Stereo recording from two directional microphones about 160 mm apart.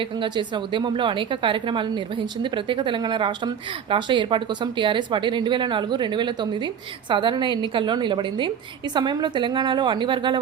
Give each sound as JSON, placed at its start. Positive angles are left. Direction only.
{"t": 0.2, "sound": "a woman's voice", "side_deg": -30}